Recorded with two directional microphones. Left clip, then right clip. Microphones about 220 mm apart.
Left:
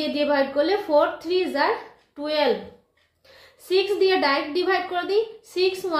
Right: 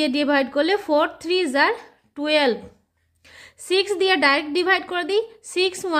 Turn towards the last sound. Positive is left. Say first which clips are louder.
# right 1 dB
turn(degrees=-40)  # may be behind; listen again after turning